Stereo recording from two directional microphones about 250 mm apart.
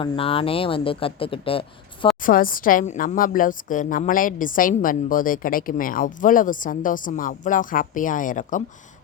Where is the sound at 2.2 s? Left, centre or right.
Left.